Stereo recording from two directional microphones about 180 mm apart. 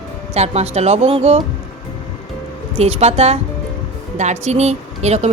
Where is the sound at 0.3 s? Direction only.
35° right (ahead or behind).